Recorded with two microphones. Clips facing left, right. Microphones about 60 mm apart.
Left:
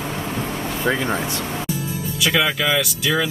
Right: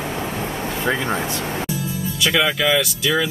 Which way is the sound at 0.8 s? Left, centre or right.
Centre.